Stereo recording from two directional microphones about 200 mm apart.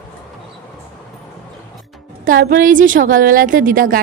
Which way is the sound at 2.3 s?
45° right (ahead or behind).